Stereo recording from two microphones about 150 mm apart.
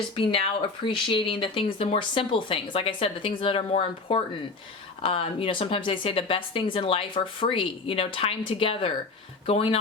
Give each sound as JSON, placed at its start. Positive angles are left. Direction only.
{"t": 0.2, "sound": "speech", "side_deg": 35}